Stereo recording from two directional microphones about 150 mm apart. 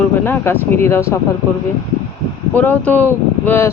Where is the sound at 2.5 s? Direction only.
10° left (ahead or behind).